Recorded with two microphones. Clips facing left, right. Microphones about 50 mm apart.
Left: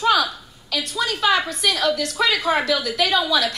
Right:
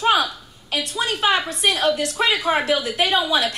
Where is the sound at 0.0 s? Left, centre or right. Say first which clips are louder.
Even; right.